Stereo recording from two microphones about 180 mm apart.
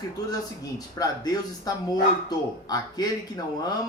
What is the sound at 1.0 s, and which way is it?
Speech, 20° left (ahead or behind).